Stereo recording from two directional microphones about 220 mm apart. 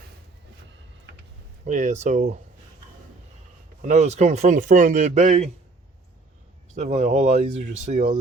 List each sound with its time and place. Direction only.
1.1 s a sound: 55° right (ahead or behind)
1.6 s speech: 35° right (ahead or behind)
3.8 s speech: 35° right (ahead or behind)
6.7 s speech: 30° right (ahead or behind)